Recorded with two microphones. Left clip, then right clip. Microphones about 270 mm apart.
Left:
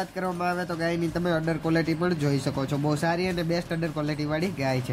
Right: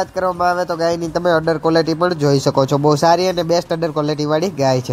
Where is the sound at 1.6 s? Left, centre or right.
Centre.